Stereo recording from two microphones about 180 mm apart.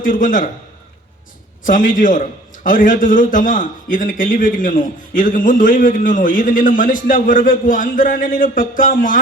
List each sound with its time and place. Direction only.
0.0 s a man's voice: 50° left (ahead or behind)
1.6 s a man's voice: 50° left (ahead or behind)